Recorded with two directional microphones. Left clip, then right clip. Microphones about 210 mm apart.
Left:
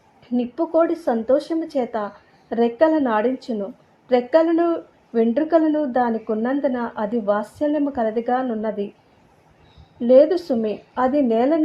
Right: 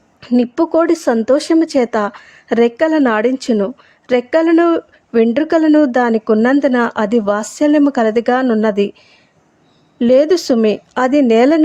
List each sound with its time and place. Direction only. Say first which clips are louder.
0.2 s a woman's voice: right 9 dB; 30° right (ahead or behind)
10.0 s a woman's voice: right 3 dB; 35° right (ahead or behind)